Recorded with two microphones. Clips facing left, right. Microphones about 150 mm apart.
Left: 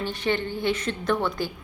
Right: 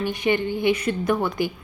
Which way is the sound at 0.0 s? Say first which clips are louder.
Right 4 dB; 15° right (ahead or behind).